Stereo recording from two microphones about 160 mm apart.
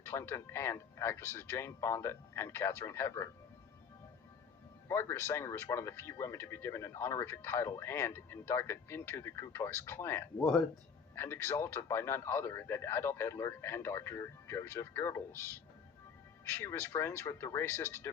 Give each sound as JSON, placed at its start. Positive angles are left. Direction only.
{"t": 0.0, "sound": "speech", "side_deg": 15}
{"t": 4.9, "sound": "speech", "side_deg": 15}